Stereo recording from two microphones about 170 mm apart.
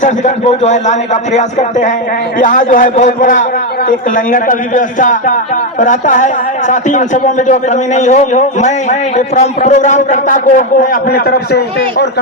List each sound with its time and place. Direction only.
0.0 s a man's voice: 45° left (ahead or behind)